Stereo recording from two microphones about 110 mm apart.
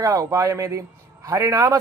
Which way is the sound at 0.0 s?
30° right (ahead or behind).